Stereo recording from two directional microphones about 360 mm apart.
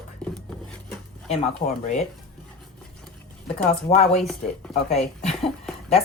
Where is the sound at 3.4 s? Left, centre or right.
Centre.